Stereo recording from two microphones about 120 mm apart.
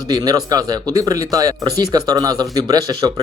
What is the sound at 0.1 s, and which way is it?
Speech, 35° right (ahead or behind).